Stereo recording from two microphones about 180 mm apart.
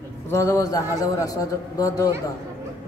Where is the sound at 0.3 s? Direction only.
15° left (ahead or behind).